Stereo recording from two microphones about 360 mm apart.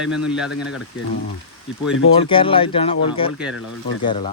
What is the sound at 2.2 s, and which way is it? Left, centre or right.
Speech, centre.